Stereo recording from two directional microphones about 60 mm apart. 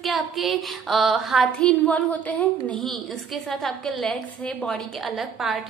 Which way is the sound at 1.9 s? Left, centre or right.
Left.